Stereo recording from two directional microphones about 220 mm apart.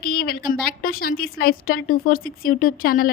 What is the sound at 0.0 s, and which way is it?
A woman's voice, 40° left (ahead or behind).